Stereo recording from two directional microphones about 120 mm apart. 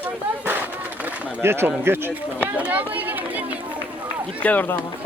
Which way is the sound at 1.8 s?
20° right (ahead or behind).